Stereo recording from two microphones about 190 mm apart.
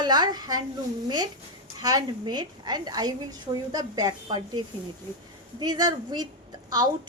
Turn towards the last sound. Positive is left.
turn(degrees=-20)  # may be behind; listen again after turning